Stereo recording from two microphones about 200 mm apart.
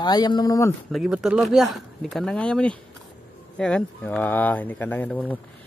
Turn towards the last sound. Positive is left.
turn(degrees=10)  # may be behind; listen again after turning